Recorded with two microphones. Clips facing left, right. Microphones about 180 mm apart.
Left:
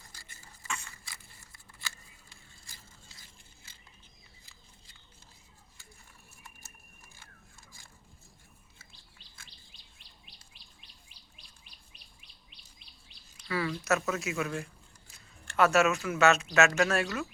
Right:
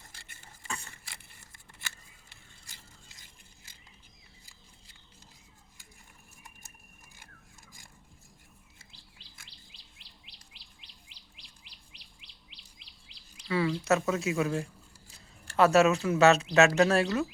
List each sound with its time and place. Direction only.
0.7 s a sound: 35° right (ahead or behind)
9.7 s chirp: 90° right
11.9 s chirp: 90° right
13.1 s bird vocalization: 90° right
13.5 s speech: 25° right (ahead or behind)